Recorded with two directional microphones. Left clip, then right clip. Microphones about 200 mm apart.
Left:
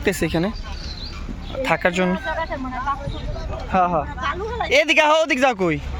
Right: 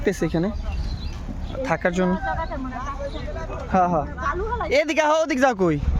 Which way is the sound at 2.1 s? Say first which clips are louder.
Left 2 dB; 45° left (ahead or behind).